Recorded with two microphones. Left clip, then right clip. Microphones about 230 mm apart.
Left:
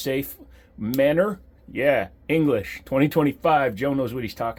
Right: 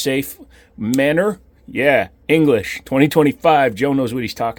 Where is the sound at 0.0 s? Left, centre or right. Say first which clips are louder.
Right 6 dB; right.